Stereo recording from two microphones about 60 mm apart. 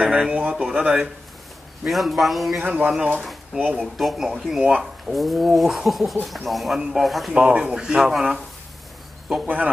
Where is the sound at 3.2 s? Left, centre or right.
Centre.